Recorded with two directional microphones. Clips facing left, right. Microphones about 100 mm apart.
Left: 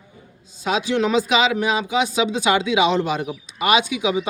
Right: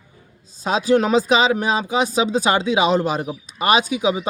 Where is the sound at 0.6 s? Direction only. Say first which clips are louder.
Right 3 dB; 40° right (ahead or behind).